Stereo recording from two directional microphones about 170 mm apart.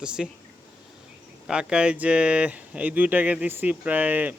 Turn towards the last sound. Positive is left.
turn(degrees=-10)  # may be behind; listen again after turning